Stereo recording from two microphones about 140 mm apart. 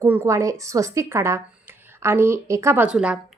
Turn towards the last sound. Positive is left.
turn(degrees=-5)  # may be behind; listen again after turning